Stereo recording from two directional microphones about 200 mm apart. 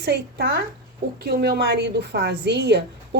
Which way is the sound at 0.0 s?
55° right (ahead or behind).